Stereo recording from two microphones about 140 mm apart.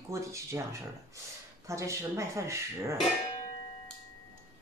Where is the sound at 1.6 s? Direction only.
20° right (ahead or behind).